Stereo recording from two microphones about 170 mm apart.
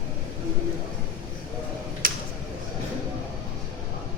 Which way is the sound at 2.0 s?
55° right (ahead or behind).